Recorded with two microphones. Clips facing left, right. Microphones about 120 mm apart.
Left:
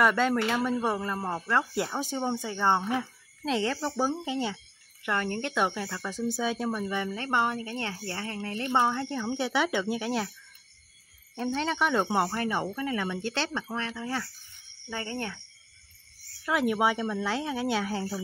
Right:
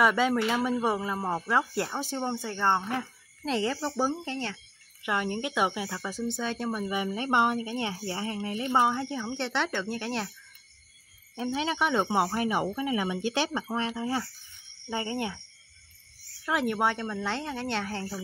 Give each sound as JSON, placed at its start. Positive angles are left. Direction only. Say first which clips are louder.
{"t": 0.0, "sound": "speech", "louder": "even", "side_deg": -5}
{"t": 4.1, "sound": "speech", "louder": "left 3 dB", "side_deg": 10}
{"t": 5.0, "sound": "speech", "louder": "even", "side_deg": -10}
{"t": 6.7, "sound": "speech", "louder": "even", "side_deg": -10}
{"t": 11.3, "sound": "speech", "louder": "even", "side_deg": -5}
{"t": 16.4, "sound": "speech", "louder": "left 1 dB", "side_deg": 0}